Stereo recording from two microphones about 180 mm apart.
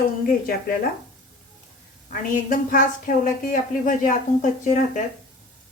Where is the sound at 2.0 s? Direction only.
50° left (ahead or behind).